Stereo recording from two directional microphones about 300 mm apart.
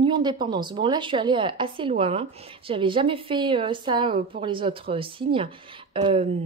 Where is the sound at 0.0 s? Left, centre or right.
Centre.